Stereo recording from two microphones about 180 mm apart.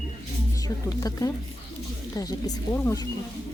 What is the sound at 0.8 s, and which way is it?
Speech, 20° left (ahead or behind).